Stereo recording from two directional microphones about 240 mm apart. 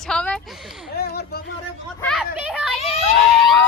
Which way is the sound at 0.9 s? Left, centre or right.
Left.